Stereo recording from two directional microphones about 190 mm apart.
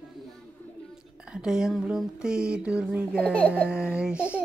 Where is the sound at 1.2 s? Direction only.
5° right (ahead or behind).